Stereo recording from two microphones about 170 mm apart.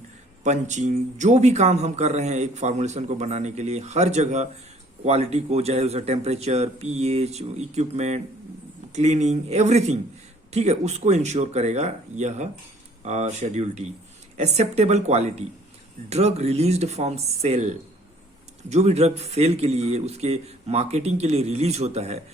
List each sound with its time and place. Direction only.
0.4 s speech: 45° right (ahead or behind)